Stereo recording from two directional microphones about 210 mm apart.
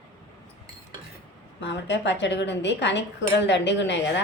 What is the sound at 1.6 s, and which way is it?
A woman's voice, 55° left (ahead or behind).